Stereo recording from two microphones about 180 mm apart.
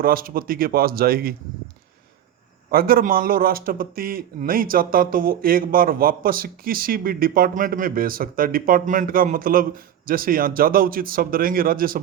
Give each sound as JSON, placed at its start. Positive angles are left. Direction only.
{"t": 0.0, "sound": "a man's voice", "side_deg": -55}
{"t": 2.6, "sound": "a man's voice", "side_deg": -55}